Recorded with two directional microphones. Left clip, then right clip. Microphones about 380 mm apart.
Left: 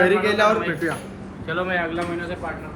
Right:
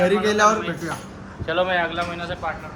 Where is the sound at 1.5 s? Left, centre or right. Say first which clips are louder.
Right 3 dB; right.